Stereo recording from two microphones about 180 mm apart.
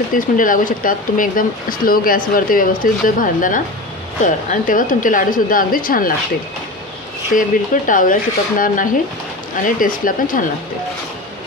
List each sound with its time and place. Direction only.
0.1 s speech: 50° left (ahead or behind)
7.3 s speech: 50° left (ahead or behind)